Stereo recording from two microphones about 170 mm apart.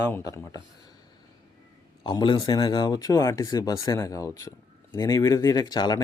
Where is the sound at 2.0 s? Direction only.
30° left (ahead or behind).